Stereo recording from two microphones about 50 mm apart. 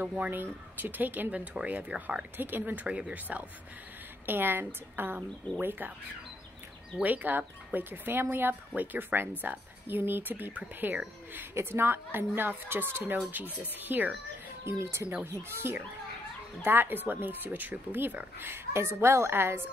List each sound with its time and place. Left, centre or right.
0.3 s speech: right
2.3 s speech: right
2.9 s speech: right
4.3 s speech: right
7.0 s speech: right
11.5 s speech: right
14.7 s speech: right
15.4 s speech: right
18.7 s speech: right